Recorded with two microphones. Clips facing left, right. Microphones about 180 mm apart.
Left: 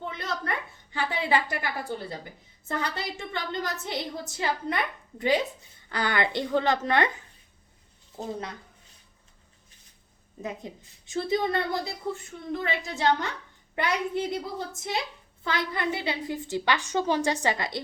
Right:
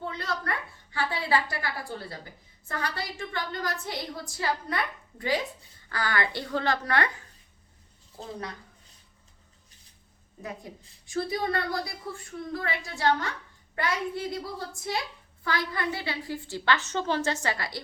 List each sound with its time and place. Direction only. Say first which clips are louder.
0.0 s a sound: even; 20° left (ahead or behind)
2.6 s a woman's voice: left 2 dB; 20° left (ahead or behind)
10.4 s a woman's voice: left 3 dB; 20° left (ahead or behind)
15.4 s a woman's voice: left 1 dB; 20° left (ahead or behind)